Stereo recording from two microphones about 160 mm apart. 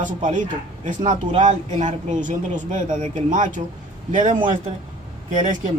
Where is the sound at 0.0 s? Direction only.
50° right (ahead or behind).